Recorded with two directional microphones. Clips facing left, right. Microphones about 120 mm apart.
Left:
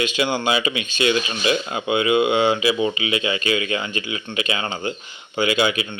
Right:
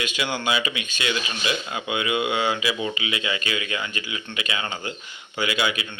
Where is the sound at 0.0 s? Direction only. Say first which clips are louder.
Left 5 dB; 25° left (ahead or behind).